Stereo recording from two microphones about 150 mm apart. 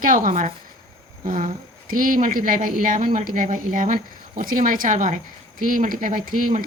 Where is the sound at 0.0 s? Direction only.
65° right (ahead or behind).